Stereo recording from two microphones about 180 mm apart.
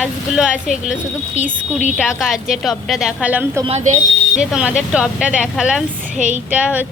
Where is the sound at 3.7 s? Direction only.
35° right (ahead or behind).